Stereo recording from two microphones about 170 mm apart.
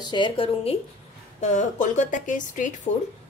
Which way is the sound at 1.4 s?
45° left (ahead or behind).